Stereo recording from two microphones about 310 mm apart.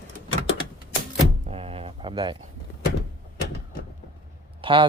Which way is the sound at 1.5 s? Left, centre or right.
Centre.